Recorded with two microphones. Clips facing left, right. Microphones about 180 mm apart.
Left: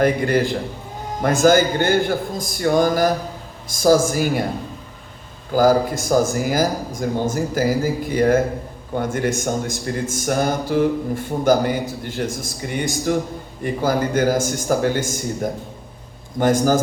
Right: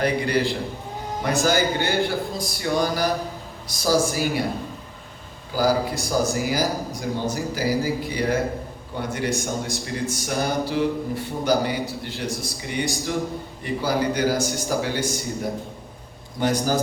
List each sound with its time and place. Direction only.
0.0 s speech: 50° left (ahead or behind)
1.5 s speech: 55° left (ahead or behind)
5.5 s speech: 50° left (ahead or behind)
12.8 s a man's voice: 20° left (ahead or behind)
13.6 s speech: 50° left (ahead or behind)
16.4 s speech: 50° left (ahead or behind)